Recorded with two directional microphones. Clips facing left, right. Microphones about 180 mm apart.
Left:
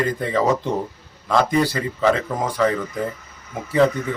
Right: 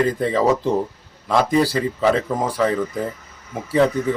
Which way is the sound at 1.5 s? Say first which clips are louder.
Right 2 dB; 35° right (ahead or behind).